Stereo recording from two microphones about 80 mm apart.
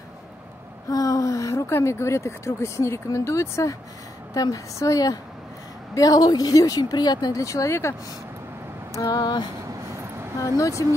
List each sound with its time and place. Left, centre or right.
0.8 s speech: left
7.4 s speech: left
8.9 s vehicle: left
10.6 s speech: left